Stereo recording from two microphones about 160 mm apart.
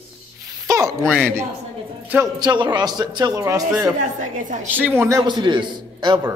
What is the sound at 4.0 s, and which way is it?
Speech, 55° right (ahead or behind).